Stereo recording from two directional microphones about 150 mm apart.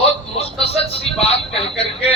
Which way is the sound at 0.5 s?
40° left (ahead or behind).